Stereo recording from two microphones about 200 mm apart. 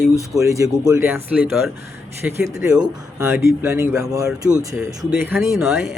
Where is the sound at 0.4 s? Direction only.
15° right (ahead or behind).